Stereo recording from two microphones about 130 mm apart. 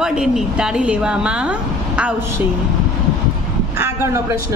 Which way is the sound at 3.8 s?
20° right (ahead or behind).